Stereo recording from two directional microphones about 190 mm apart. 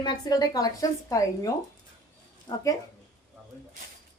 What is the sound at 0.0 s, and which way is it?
A woman's voice, 20° left (ahead or behind).